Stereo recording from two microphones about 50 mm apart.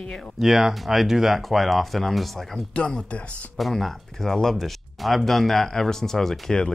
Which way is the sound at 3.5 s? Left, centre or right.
Centre.